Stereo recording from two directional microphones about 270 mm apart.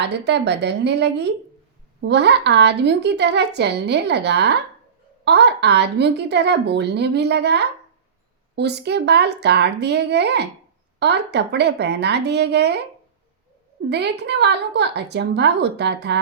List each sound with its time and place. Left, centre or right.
0.0 s a woman's voice: right
13.9 s a woman's voice: right